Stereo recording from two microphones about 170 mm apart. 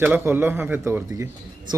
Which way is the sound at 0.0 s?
10° right (ahead or behind).